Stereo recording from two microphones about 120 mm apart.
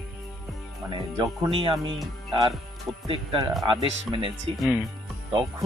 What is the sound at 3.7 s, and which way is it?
Speech, 45° right (ahead or behind).